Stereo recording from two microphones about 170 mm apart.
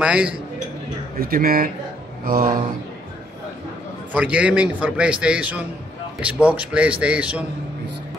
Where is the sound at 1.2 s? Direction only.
60° right (ahead or behind).